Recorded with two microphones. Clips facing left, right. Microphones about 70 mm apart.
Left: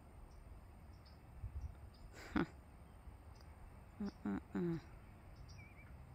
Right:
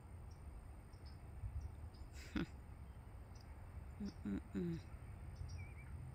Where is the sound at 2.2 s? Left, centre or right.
Left.